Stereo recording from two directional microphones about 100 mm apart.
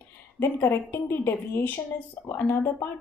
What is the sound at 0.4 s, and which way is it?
Speech, 25° left (ahead or behind).